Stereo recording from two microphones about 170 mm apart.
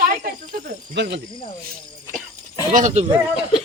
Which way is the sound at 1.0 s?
90° right.